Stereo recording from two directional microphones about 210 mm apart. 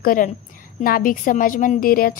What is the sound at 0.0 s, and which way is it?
A woman's voice, 40° left (ahead or behind).